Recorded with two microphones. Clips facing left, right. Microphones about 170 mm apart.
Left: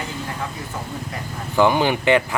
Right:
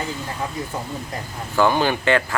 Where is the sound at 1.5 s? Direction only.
15° left (ahead or behind).